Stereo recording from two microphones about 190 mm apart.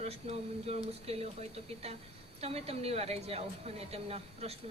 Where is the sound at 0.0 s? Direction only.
35° right (ahead or behind).